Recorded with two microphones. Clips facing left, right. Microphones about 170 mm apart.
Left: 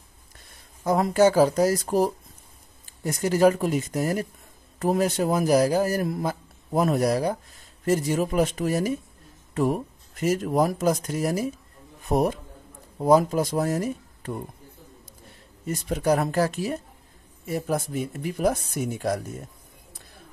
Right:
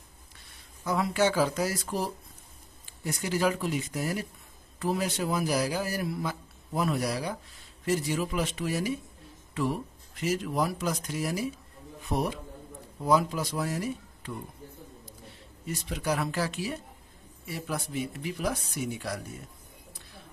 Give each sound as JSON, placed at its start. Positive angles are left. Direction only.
{"t": 0.5, "sound": "a man's voice", "side_deg": 45}